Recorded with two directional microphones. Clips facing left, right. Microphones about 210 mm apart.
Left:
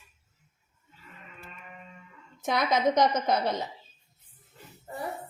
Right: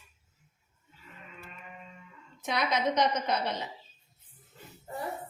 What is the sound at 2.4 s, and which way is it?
A woman's voice, 45° left (ahead or behind).